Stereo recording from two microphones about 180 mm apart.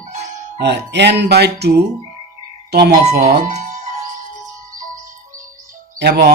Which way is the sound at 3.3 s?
45° right (ahead or behind).